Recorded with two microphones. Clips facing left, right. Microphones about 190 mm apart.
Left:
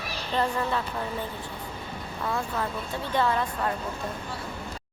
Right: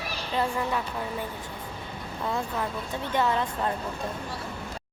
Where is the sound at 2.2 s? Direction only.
20° right (ahead or behind).